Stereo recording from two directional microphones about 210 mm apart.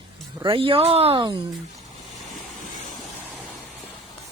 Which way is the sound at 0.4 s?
25° right (ahead or behind).